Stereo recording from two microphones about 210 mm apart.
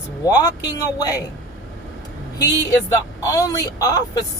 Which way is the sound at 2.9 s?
15° left (ahead or behind).